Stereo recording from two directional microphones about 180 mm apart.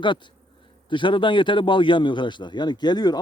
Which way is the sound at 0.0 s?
25° left (ahead or behind).